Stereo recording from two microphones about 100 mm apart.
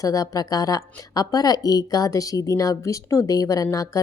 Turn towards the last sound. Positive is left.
turn(degrees=35)  # may be behind; listen again after turning